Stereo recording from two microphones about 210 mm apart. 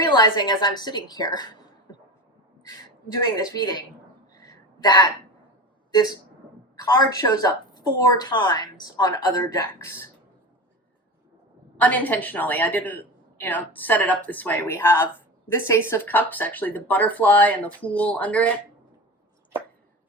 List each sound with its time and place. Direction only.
0.1 s a woman's voice: 20° left (ahead or behind)
2.6 s a woman's voice: 20° left (ahead or behind)
4.4 s a sound: 20° left (ahead or behind)
5.9 s a woman's voice: 20° left (ahead or behind)
11.8 s a woman's voice: 10° left (ahead or behind)